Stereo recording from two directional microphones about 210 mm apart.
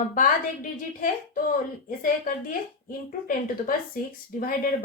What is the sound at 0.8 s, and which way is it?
A woman's voice, 40° left (ahead or behind).